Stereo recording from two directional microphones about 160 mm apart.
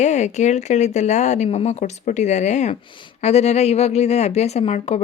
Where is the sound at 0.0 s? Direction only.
45° left (ahead or behind).